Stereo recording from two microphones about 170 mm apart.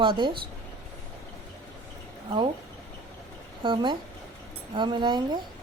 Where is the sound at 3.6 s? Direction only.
25° right (ahead or behind).